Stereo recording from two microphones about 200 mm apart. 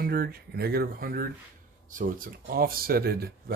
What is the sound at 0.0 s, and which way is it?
Speech, 50° right (ahead or behind).